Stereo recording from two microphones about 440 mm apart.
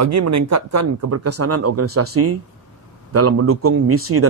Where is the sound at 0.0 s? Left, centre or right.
Right.